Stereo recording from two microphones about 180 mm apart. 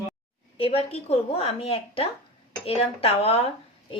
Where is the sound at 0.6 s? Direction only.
35° left (ahead or behind).